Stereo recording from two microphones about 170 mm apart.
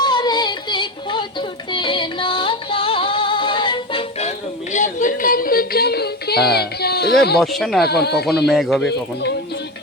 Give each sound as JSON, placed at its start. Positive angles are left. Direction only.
{"t": 0.0, "sound": "music", "side_deg": 25}
{"t": 7.3, "sound": "speech", "side_deg": 0}
{"t": 7.9, "sound": "speech", "side_deg": 70}
{"t": 8.4, "sound": "speech", "side_deg": 0}